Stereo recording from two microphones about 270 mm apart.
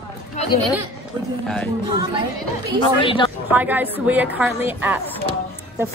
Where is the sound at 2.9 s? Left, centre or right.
Centre.